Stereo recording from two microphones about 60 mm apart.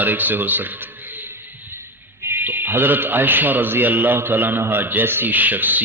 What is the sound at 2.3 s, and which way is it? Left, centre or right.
A man's voice, right.